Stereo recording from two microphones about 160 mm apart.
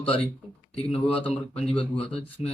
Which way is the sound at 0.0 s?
35° left (ahead or behind).